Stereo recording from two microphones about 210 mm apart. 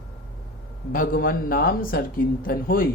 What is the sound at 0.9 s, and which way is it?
Speech, 40° left (ahead or behind).